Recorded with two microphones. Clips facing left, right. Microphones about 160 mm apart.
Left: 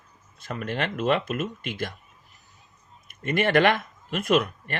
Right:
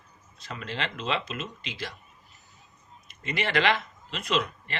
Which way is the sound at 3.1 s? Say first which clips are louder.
Left 7 dB; 50° left (ahead or behind).